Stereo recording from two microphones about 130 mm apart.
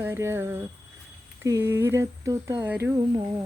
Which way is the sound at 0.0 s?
20° right (ahead or behind).